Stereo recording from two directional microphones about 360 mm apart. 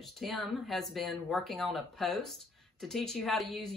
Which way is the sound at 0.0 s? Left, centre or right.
Centre.